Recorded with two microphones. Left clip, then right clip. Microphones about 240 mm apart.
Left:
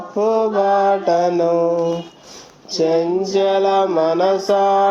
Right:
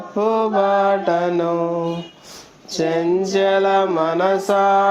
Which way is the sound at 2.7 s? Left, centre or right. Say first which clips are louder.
Left 2 dB; right.